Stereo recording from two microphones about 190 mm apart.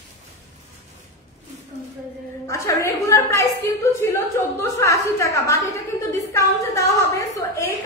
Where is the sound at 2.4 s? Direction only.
15° left (ahead or behind).